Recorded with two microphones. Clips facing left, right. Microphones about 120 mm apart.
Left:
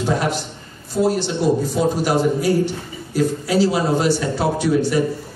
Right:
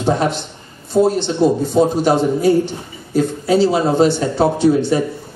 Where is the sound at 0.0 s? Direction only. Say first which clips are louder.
Right 3 dB; 25° right (ahead or behind).